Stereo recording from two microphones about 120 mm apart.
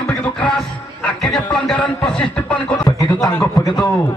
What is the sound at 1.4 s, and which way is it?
Speech, 10° left (ahead or behind).